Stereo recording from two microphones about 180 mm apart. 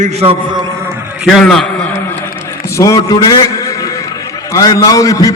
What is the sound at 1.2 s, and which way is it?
Speech, centre (ahead or behind).